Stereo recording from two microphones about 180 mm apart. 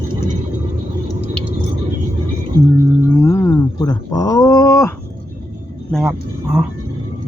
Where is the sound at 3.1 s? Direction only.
15° left (ahead or behind).